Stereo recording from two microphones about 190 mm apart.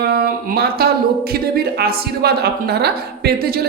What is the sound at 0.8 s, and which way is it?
Speech, 55° right (ahead or behind).